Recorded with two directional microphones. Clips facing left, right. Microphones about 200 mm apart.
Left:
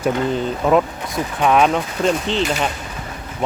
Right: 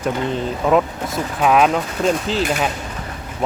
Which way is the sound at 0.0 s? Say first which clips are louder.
Left 2 dB; centre (ahead or behind).